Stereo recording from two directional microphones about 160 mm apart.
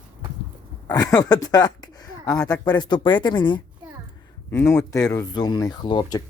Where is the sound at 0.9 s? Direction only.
25° left (ahead or behind).